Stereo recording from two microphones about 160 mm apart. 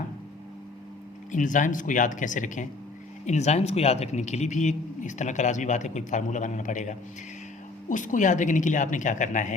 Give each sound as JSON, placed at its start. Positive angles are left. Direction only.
{"t": 1.3, "sound": "a man's voice", "side_deg": 50}